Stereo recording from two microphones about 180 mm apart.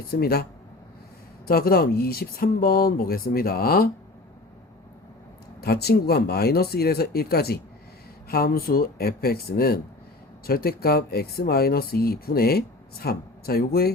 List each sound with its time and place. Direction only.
0.2 s speech: 60° left (ahead or behind)
1.5 s speech: 55° left (ahead or behind)
5.5 s speech: 60° left (ahead or behind)